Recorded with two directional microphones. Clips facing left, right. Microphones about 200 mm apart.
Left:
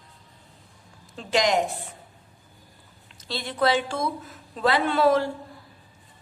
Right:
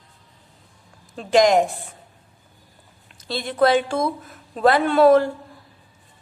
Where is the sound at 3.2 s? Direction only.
50° right (ahead or behind).